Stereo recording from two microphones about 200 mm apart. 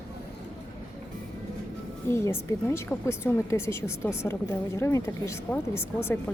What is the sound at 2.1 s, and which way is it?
A woman's voice, 10° left (ahead or behind).